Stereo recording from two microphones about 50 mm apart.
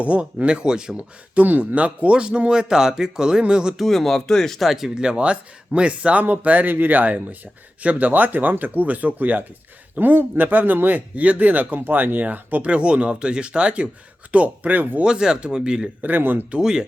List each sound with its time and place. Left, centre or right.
0.0 s speech: right
0.9 s speech: right
3.8 s speech: centre
4.7 s speech: centre; by 12.7 s right
12.7 s speech: right
15.0 s speech: centre
16.0 s speech: right
16.6 s speech: centre